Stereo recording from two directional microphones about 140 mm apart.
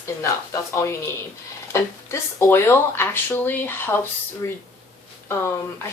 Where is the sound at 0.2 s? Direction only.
20° left (ahead or behind).